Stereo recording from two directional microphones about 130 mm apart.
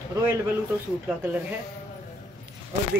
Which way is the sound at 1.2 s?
15° right (ahead or behind).